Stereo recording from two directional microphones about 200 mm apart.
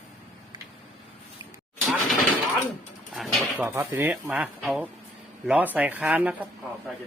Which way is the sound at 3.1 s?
Centre (ahead or behind).